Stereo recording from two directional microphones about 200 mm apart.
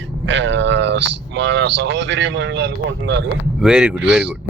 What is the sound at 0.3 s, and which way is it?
Speech, 65° right (ahead or behind).